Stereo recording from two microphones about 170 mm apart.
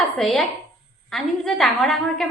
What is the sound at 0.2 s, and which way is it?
A woman's voice, centre (ahead or behind).